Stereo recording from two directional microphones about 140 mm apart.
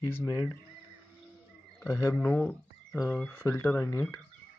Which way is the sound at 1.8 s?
25° left (ahead or behind).